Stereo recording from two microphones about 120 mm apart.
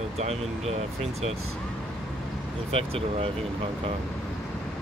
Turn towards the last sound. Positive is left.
turn(degrees=-55)  # may be behind; listen again after turning